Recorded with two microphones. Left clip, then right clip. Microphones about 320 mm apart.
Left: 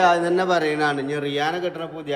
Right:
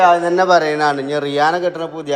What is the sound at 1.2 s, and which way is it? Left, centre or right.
Speech, right.